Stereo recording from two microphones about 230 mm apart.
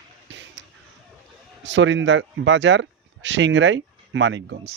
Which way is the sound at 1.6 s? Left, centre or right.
Right.